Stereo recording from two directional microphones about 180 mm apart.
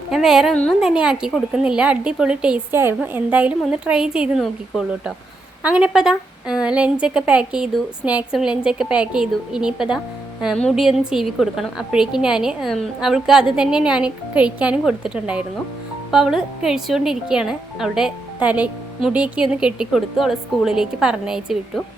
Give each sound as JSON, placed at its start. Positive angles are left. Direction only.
{"t": 0.1, "sound": "a woman's voice", "side_deg": 0}